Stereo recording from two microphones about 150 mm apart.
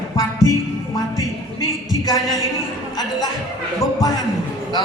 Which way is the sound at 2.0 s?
25° left (ahead or behind).